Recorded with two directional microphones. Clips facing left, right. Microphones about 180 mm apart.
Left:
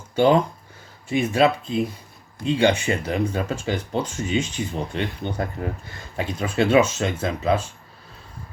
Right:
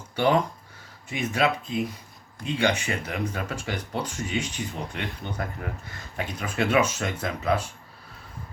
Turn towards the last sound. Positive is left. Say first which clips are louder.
# left 4 dB
turn(degrees=25)  # may be behind; listen again after turning